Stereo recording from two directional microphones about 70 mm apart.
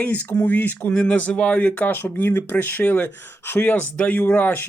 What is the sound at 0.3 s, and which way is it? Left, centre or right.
Speech, left.